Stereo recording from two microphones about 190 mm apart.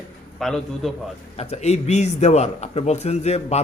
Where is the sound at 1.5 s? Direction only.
35° left (ahead or behind).